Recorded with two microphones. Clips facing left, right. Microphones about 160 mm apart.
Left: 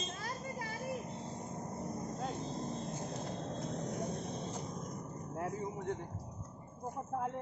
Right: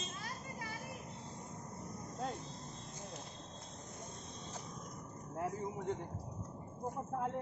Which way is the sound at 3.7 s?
70° left (ahead or behind).